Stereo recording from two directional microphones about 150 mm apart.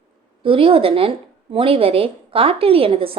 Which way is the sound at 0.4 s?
40° right (ahead or behind).